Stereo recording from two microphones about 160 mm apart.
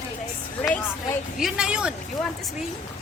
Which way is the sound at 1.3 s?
5° right (ahead or behind).